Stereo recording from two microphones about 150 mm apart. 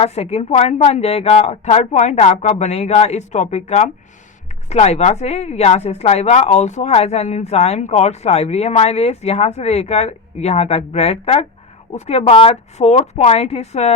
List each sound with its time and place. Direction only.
0.0 s speech: 45° left (ahead or behind)